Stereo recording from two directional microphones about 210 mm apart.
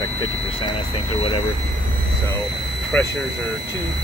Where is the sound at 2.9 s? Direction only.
10° left (ahead or behind).